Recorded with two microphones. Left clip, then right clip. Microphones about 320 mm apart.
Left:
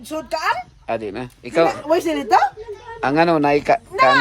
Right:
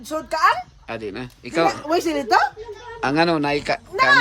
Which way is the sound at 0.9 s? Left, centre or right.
Centre.